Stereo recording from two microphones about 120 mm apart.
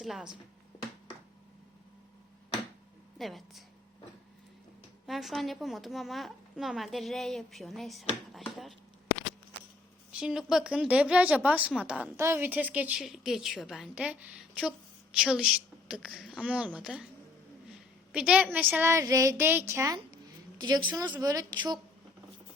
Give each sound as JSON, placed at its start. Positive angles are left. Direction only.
{"t": 0.0, "sound": "a woman's voice", "side_deg": -5}
{"t": 3.2, "sound": "a woman's voice", "side_deg": 0}
{"t": 5.0, "sound": "a woman's voice", "side_deg": 0}
{"t": 10.1, "sound": "a woman's voice", "side_deg": -5}
{"t": 12.1, "sound": "a woman's voice", "side_deg": -20}
{"t": 18.1, "sound": "a woman's voice", "side_deg": -10}